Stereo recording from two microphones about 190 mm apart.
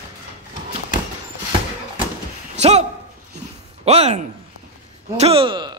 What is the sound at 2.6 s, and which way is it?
Speech, 35° right (ahead or behind).